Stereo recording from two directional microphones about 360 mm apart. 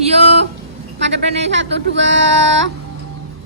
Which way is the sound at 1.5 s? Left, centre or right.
Right.